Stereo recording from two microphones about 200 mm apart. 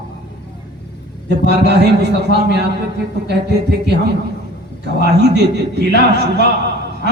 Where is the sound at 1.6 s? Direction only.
55° right (ahead or behind).